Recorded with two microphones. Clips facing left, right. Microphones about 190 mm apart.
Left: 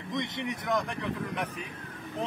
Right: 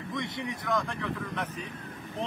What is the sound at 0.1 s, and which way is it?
Speech, 20° left (ahead or behind).